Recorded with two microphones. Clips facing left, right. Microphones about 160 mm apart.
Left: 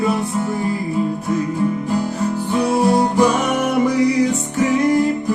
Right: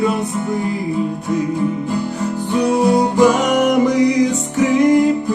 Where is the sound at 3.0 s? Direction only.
15° right (ahead or behind).